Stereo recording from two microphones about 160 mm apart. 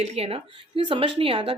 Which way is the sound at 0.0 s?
40° right (ahead or behind).